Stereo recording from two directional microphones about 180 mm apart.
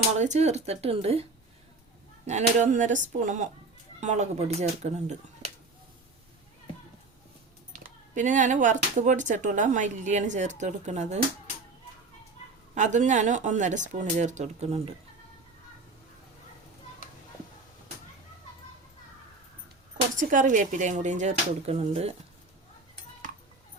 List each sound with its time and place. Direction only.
0.2 s speech: 40° right (ahead or behind)
2.2 s speech: 40° right (ahead or behind)
7.7 s speech: 45° right (ahead or behind)
12.7 s speech: 40° right (ahead or behind)
20.1 s speech: 45° right (ahead or behind)